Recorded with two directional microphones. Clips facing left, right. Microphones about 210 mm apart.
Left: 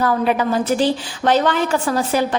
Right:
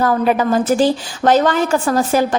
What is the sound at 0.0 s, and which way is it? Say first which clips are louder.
A woman's voice: right 2 dB; 45° right (ahead or behind).